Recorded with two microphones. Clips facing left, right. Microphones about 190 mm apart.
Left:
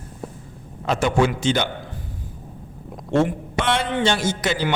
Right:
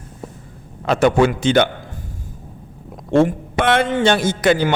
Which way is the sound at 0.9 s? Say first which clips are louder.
Right 5 dB; 60° right (ahead or behind).